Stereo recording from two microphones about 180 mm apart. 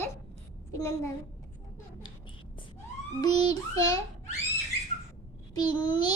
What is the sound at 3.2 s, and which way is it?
Child singing, 20° left (ahead or behind).